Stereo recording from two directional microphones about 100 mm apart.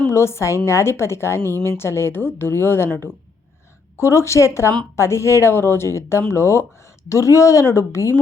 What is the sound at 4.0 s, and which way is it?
Speech, 30° left (ahead or behind).